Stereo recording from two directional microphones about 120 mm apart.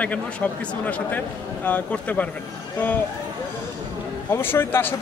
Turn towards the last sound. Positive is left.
turn(degrees=20)  # may be behind; listen again after turning